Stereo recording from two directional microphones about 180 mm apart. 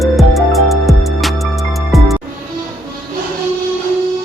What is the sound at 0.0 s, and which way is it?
Music, centre (ahead or behind).